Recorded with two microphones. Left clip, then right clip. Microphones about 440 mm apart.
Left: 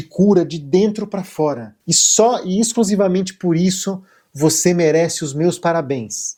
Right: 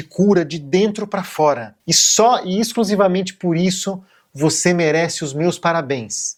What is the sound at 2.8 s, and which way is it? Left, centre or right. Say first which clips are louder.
Speech: right 3 dB; right.